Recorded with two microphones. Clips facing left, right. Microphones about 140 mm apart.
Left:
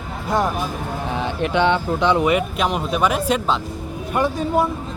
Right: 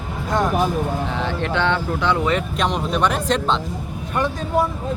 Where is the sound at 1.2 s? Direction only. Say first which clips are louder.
Left 5 dB; 15° left (ahead or behind).